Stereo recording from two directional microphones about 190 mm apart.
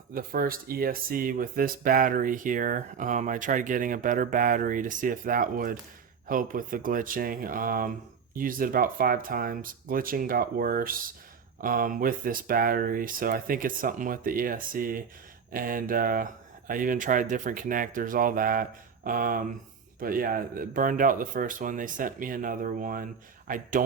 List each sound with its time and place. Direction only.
0.1 s speech: 50° right (ahead or behind)